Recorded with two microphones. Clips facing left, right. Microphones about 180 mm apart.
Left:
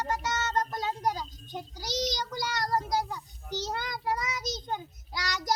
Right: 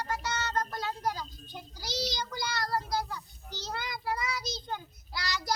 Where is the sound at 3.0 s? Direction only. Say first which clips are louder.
Left 3 dB; 20° left (ahead or behind).